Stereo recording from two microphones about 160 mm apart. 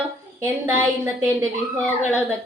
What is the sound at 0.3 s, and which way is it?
Speech, 15° right (ahead or behind).